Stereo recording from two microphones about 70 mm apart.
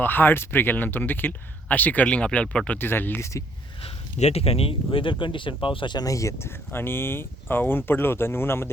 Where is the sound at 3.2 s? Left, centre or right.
Left.